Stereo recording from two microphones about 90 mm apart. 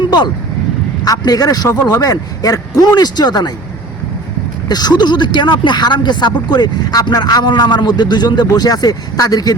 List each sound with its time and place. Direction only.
1.0 s speech: 45° left (ahead or behind)
4.7 s speech: 50° left (ahead or behind)